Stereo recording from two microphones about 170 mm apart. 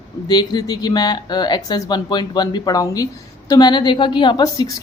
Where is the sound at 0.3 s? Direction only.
25° left (ahead or behind).